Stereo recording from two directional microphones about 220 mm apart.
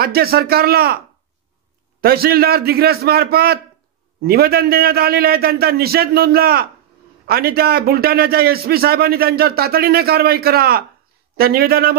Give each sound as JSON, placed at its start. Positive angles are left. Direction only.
{"t": 0.0, "sound": "a man's voice", "side_deg": -45}
{"t": 2.0, "sound": "a man's voice", "side_deg": -45}